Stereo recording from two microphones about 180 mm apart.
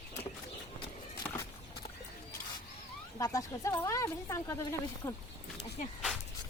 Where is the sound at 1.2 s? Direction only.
5° left (ahead or behind).